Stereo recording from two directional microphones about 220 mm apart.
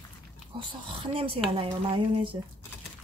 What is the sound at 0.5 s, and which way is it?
Speech, 25° right (ahead or behind).